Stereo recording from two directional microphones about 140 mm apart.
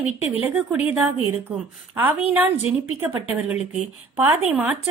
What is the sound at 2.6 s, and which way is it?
A woman's voice, 10° right (ahead or behind).